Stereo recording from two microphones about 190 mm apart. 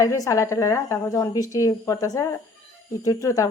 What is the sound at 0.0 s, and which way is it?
A woman's voice, 15° left (ahead or behind).